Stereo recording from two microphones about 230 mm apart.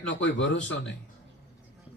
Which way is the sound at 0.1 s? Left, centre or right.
Left.